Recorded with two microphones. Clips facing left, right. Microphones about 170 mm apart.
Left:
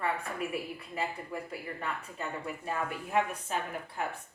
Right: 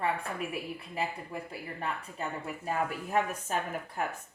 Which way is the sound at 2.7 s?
40° right (ahead or behind).